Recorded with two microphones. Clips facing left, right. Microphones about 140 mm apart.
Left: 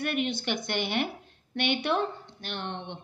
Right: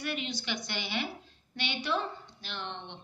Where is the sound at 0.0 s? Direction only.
55° left (ahead or behind).